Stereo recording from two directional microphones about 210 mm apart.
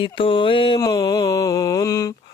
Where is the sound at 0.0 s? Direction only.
25° left (ahead or behind).